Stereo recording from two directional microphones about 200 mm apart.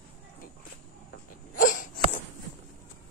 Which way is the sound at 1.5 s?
40° left (ahead or behind).